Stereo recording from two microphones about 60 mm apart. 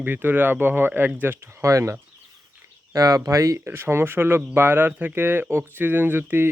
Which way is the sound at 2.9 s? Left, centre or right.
Right.